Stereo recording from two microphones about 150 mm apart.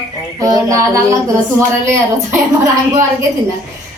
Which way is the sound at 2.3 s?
20° right (ahead or behind).